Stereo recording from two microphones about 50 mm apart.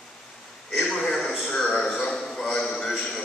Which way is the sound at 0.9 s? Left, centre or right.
Centre.